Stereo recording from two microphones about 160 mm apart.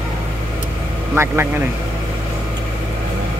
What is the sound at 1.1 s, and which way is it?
Speech, 15° right (ahead or behind).